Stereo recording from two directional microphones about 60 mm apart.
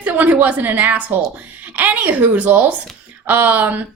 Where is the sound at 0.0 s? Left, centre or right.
Right.